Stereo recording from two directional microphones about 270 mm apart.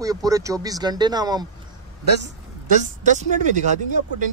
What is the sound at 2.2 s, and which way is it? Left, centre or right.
A woman's voice, right.